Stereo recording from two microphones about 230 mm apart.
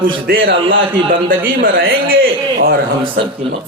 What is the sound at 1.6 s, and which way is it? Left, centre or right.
A man's voice, right.